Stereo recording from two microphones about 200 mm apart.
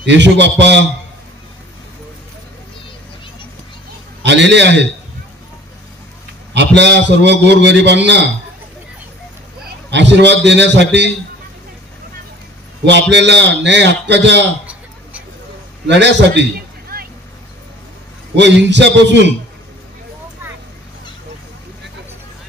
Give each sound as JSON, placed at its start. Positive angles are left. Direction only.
{"t": 0.0, "sound": "a man's voice", "side_deg": -60}
{"t": 4.2, "sound": "a man's voice", "side_deg": -60}
{"t": 6.5, "sound": "a man's voice", "side_deg": -60}
{"t": 9.8, "sound": "a man's voice", "side_deg": -60}
{"t": 13.1, "sound": "a man's voice", "side_deg": -60}
{"t": 15.9, "sound": "a man's voice", "side_deg": -60}
{"t": 18.3, "sound": "a man's voice", "side_deg": -60}